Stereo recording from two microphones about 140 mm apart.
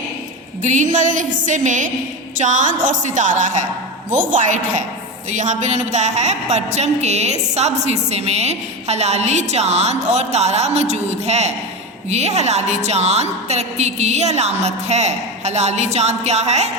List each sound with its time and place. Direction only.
0.6 s a woman's voice: 60° right (ahead or behind)